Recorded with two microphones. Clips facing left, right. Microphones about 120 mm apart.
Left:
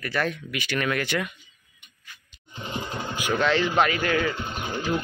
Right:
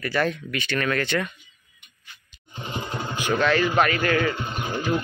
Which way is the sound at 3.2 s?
15° left (ahead or behind).